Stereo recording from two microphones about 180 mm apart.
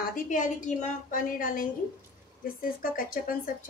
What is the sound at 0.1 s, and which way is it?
A woman's voice, 45° left (ahead or behind).